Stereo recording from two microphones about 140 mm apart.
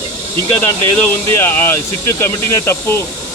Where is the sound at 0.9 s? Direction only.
15° left (ahead or behind).